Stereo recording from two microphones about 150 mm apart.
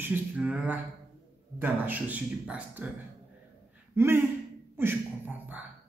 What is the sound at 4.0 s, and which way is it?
Speech, 15° right (ahead or behind).